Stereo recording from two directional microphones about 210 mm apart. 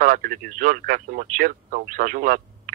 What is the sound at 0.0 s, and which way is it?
Speech, 40° right (ahead or behind).